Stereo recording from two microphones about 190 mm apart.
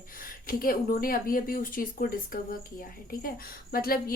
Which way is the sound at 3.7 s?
50° left (ahead or behind).